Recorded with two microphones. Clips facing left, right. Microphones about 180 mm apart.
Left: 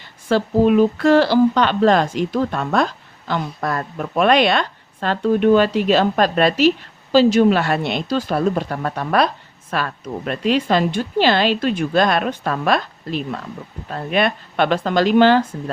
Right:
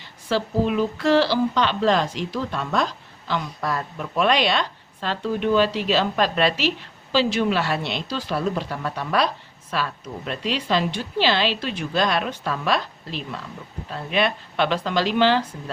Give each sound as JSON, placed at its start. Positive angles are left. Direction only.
{"t": 0.3, "sound": "speech", "side_deg": 50}